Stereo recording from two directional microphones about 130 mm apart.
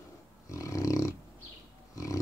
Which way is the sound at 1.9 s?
25° left (ahead or behind).